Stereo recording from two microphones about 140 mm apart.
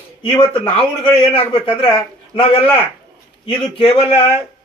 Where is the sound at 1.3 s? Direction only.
40° left (ahead or behind).